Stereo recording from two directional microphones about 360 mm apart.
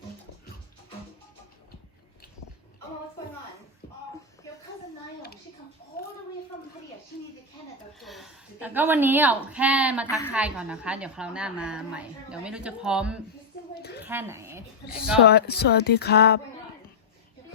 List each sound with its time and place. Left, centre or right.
7.1 s a sound: left
7.9 s a woman's voice: centre
10.1 s a woman's voice: centre
10.3 s a woman's voice: centre
15.3 s speech: left